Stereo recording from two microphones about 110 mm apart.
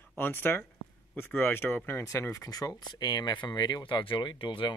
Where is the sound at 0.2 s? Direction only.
20° left (ahead or behind).